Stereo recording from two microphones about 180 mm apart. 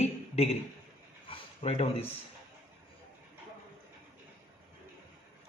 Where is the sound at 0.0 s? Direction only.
35° left (ahead or behind).